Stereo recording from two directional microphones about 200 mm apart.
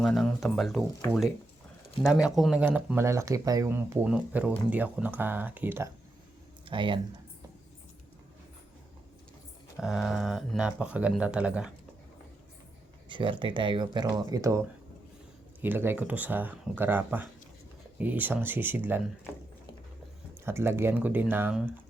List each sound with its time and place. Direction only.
0.0 s speech: centre (ahead or behind)
2.0 s speech: centre (ahead or behind)
6.7 s speech: 25° right (ahead or behind)
9.8 s speech: centre (ahead or behind)
13.1 s speech: 25° right (ahead or behind)
15.6 s speech: 10° right (ahead or behind)
20.4 s speech: 10° right (ahead or behind)